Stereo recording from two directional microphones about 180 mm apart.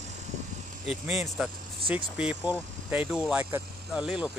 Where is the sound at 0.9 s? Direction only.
Centre (ahead or behind).